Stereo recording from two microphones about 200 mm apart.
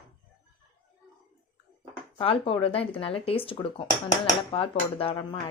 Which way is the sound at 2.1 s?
25° left (ahead or behind).